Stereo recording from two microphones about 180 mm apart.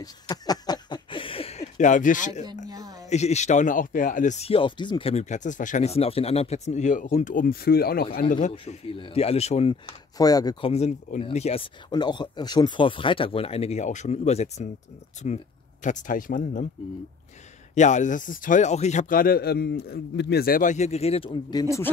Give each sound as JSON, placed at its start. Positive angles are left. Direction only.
{"t": 0.0, "sound": "a sound", "side_deg": 20}
{"t": 2.7, "sound": "a sound", "side_deg": -20}
{"t": 3.1, "sound": "speech", "side_deg": 40}
{"t": 8.5, "sound": "speech", "side_deg": 35}
{"t": 10.1, "sound": "speech", "side_deg": 20}
{"t": 17.7, "sound": "a man's voice", "side_deg": 40}
{"t": 21.3, "sound": "speech", "side_deg": 20}